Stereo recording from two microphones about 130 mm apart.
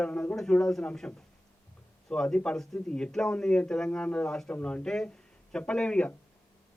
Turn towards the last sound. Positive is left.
turn(degrees=5)  # may be behind; listen again after turning